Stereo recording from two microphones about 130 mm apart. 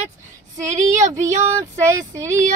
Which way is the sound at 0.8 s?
70° right (ahead or behind).